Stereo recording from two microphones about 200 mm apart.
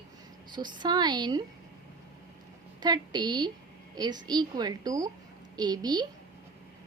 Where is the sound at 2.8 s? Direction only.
20° right (ahead or behind).